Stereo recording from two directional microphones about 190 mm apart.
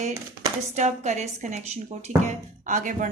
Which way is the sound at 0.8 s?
35° right (ahead or behind).